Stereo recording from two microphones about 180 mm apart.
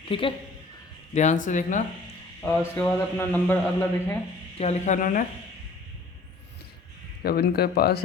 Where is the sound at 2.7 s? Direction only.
10° left (ahead or behind).